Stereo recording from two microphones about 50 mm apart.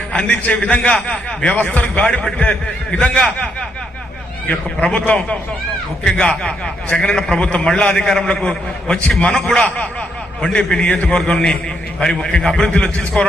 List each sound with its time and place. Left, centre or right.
0.1 s a man's voice: left
2.0 s a man's voice: centre
2.4 s a man's voice: left
4.8 s a man's voice: left